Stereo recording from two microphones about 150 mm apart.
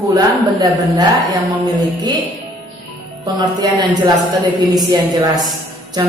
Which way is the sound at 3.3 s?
30° right (ahead or behind).